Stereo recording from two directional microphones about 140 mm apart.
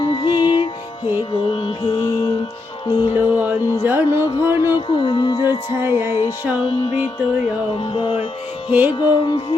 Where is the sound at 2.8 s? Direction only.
35° left (ahead or behind).